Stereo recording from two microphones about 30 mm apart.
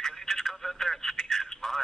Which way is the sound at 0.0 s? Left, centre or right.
Centre.